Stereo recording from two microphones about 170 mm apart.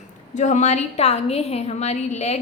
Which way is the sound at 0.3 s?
45° left (ahead or behind).